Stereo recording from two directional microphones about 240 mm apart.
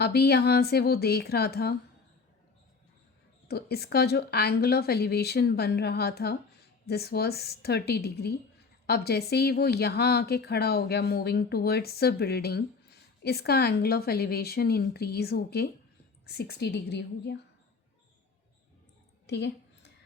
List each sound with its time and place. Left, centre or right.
0.0 s a woman's voice: left
3.5 s a woman's voice: left
19.3 s a sound: left